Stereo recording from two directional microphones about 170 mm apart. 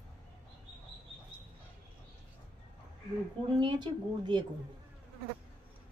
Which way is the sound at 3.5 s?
25° right (ahead or behind).